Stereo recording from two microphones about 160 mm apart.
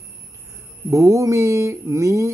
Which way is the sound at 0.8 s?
20° right (ahead or behind).